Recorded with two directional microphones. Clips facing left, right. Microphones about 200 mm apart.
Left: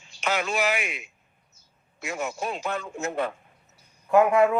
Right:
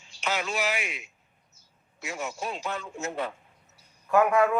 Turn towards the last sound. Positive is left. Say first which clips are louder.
# left 3 dB
turn(degrees=25)  # may be behind; listen again after turning